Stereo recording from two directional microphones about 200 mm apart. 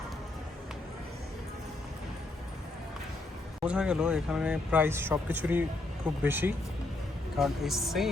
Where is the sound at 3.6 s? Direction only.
5° right (ahead or behind).